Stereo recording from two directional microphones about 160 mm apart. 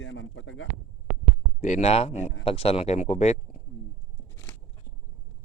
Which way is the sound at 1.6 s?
45° left (ahead or behind).